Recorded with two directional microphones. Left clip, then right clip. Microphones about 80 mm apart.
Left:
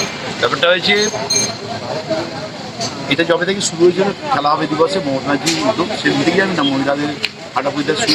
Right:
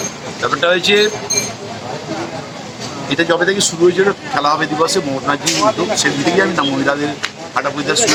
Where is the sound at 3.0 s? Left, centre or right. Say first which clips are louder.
Right 1 dB; right.